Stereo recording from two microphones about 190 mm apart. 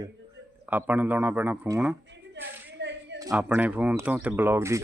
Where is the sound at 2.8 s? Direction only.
65° right (ahead or behind).